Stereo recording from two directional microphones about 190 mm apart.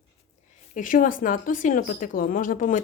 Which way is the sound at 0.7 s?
45° left (ahead or behind).